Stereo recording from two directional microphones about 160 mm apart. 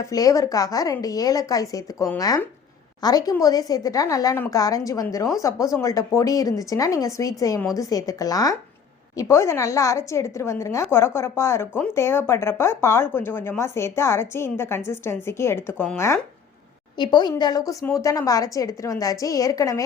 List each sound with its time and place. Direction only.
0.0 s speech: 20° left (ahead or behind)
17.0 s speech: 25° left (ahead or behind)